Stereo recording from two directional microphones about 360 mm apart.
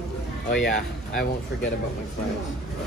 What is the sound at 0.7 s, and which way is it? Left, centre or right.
Speech, left.